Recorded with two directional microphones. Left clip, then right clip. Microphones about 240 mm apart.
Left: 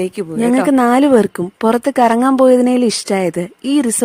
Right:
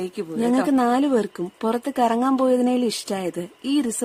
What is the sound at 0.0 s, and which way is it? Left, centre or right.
Speech, left.